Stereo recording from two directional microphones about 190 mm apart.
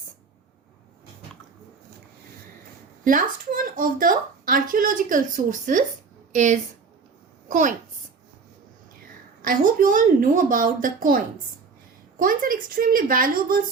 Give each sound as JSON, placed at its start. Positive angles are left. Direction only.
{"t": 3.0, "sound": "a woman's voice", "side_deg": -45}
{"t": 9.4, "sound": "a woman's voice", "side_deg": -45}
{"t": 12.2, "sound": "a woman's voice", "side_deg": -45}